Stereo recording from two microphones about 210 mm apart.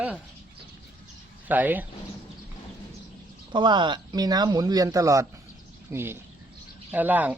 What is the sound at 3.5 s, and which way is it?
Speech, 20° right (ahead or behind).